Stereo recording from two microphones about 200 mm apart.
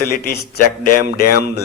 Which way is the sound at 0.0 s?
50° left (ahead or behind).